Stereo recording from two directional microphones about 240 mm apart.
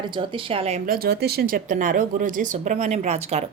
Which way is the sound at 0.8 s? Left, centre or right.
Right.